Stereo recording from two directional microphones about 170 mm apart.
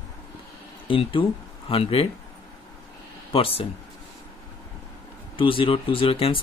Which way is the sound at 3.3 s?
30° left (ahead or behind).